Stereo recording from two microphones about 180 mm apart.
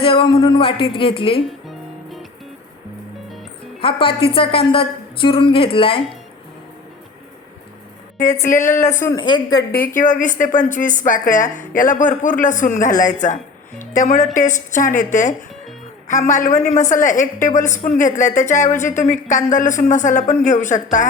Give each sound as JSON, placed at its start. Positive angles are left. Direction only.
{"t": 0.0, "sound": "a woman's voice", "side_deg": 30}
{"t": 1.5, "sound": "music", "side_deg": 0}
{"t": 3.8, "sound": "a woman's voice", "side_deg": 30}
{"t": 8.2, "sound": "a woman's voice", "side_deg": 45}
{"t": 9.1, "sound": "a woman's voice", "side_deg": 25}
{"t": 9.7, "sound": "a woman's voice", "side_deg": 50}